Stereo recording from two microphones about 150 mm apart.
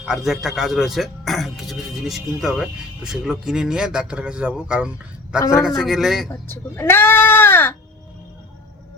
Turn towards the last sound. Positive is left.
turn(degrees=15)  # may be behind; listen again after turning